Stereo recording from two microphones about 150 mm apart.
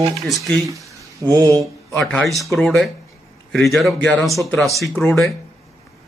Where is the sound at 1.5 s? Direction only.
Centre (ahead or behind).